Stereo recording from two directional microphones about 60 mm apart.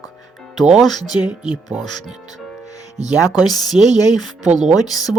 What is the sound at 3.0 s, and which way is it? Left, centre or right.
Speech, left.